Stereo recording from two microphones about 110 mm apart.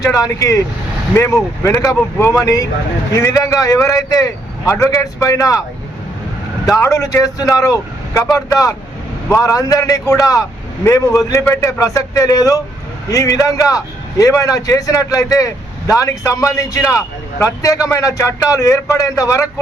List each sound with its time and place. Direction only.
0.0 s a man's voice: 30° left (ahead or behind)
6.7 s a man's voice: 25° left (ahead or behind)
11.8 s a man's voice: 30° left (ahead or behind)